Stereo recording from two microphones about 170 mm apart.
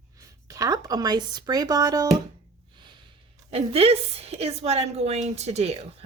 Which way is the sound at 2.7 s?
25° right (ahead or behind).